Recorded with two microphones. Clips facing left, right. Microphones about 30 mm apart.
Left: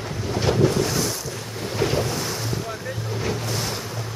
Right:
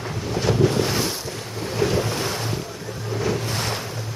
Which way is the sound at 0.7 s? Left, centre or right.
Right.